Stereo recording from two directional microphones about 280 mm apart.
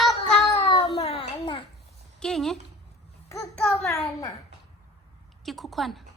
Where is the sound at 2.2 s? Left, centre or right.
Centre.